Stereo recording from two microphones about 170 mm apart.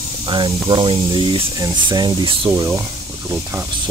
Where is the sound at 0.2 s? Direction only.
30° right (ahead or behind).